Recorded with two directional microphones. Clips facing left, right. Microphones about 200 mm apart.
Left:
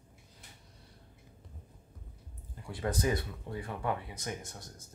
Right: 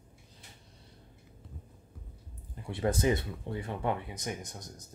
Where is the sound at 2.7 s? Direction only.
25° right (ahead or behind).